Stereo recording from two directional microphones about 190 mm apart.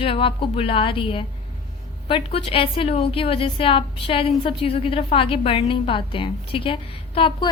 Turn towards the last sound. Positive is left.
turn(degrees=25)  # may be behind; listen again after turning